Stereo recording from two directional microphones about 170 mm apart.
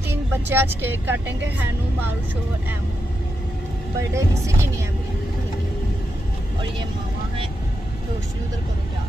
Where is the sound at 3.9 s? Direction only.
15° right (ahead or behind).